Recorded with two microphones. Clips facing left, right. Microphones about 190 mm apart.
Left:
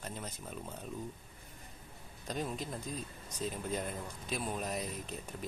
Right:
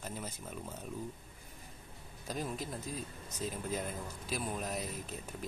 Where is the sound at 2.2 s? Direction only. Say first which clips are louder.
Left 1 dB; 5° right (ahead or behind).